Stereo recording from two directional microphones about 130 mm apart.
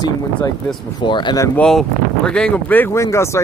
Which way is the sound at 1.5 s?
5° left (ahead or behind).